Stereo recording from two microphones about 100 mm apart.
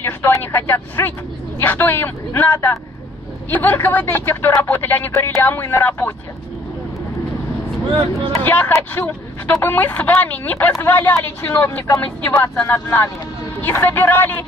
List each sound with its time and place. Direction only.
0.0 s speech: 25° left (ahead or behind)
8.4 s a woman's voice: 20° left (ahead or behind)